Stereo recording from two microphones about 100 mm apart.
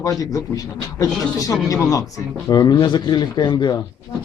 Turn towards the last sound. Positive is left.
turn(degrees=45)  # may be behind; listen again after turning